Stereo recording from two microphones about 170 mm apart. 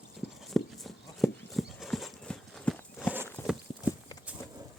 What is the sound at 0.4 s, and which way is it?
Horse, centre (ahead or behind).